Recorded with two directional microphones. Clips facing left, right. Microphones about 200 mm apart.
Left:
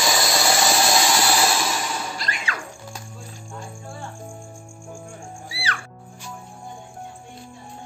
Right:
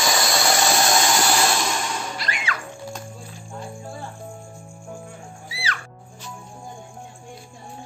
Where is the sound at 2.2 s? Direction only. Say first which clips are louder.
Right 1 dB; 40° left (ahead or behind).